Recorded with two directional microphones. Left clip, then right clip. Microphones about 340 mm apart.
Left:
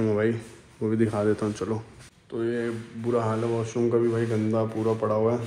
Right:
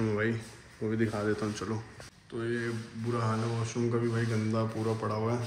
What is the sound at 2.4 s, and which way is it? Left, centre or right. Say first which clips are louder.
Speech: left 6 dB; centre.